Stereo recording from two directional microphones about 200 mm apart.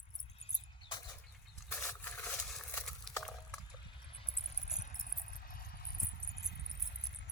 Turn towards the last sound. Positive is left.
turn(degrees=55)  # may be behind; listen again after turning